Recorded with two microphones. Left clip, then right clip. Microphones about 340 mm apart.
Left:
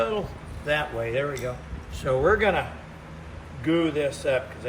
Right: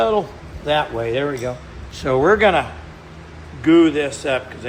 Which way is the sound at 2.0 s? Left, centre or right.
Centre.